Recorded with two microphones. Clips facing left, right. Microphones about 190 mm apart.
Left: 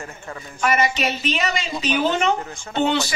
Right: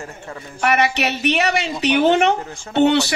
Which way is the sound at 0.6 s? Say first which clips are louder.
Right 2 dB; 65° right (ahead or behind).